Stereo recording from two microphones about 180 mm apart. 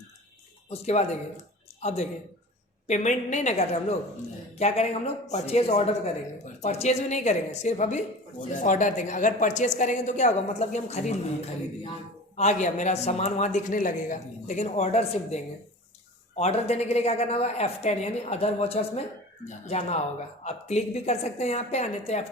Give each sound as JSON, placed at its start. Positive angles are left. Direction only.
{"t": 0.7, "sound": "a woman's voice", "side_deg": 35}
{"t": 12.4, "sound": "a woman's voice", "side_deg": 40}